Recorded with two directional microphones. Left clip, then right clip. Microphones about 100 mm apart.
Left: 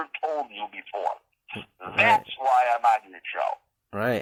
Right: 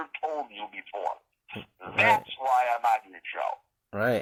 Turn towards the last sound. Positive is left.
turn(degrees=20)  # may be behind; listen again after turning